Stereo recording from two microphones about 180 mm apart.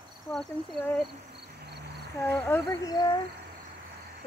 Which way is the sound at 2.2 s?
10° left (ahead or behind).